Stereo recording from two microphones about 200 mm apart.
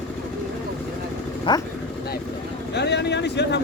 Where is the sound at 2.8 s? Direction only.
60° left (ahead or behind).